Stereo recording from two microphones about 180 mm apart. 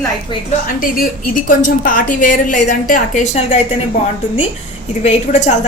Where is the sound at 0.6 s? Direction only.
50° left (ahead or behind).